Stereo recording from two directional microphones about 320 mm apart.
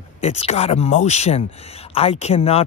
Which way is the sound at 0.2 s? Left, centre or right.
Centre.